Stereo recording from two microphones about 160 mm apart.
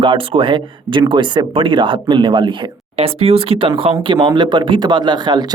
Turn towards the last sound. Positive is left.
turn(degrees=-25)  # may be behind; listen again after turning